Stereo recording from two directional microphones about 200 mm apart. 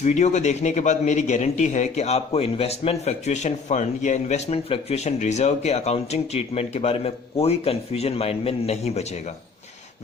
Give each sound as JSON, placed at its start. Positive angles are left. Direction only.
{"t": 0.0, "sound": "speech", "side_deg": 35}